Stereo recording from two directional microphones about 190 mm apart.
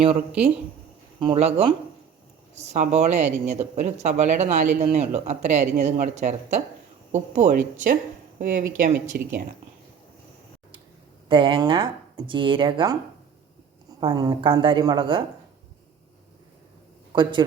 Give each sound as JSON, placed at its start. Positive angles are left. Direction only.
{"t": 0.0, "sound": "speech", "side_deg": -30}
{"t": 9.1, "sound": "speech", "side_deg": -55}
{"t": 11.3, "sound": "speech", "side_deg": -25}
{"t": 14.0, "sound": "speech", "side_deg": -20}
{"t": 17.1, "sound": "a man's voice", "side_deg": -25}